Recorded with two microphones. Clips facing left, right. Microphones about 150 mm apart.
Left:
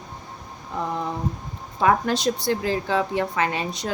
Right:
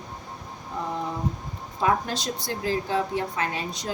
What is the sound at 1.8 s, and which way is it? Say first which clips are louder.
Speech: left 5 dB; 65° left (ahead or behind).